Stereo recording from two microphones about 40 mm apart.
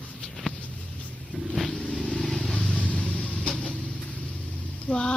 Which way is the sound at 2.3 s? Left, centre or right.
Left.